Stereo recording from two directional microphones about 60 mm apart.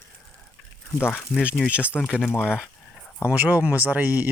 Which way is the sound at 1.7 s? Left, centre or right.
Right.